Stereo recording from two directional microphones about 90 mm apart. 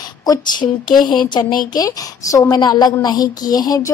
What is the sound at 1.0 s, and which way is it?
A woman's voice, 55° left (ahead or behind).